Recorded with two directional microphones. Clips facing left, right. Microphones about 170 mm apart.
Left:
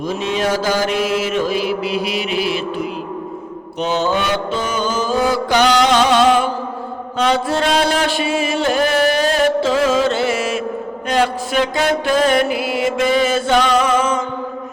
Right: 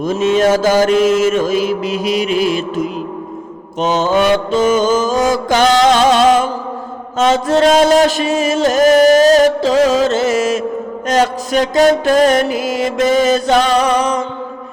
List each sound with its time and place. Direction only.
0.0 s mantra: 45° right (ahead or behind)
7.2 s a sound: 40° right (ahead or behind)
11.1 s mantra: 40° right (ahead or behind)